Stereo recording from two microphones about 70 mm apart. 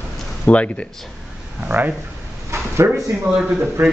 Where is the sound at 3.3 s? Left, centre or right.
Centre.